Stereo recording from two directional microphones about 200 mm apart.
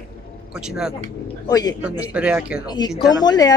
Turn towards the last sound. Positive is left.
turn(degrees=20)  # may be behind; listen again after turning